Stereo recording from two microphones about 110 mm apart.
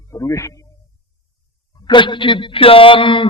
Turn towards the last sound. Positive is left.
turn(degrees=50)  # may be behind; listen again after turning